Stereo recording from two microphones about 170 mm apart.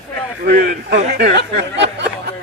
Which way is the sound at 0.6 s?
70° right (ahead or behind).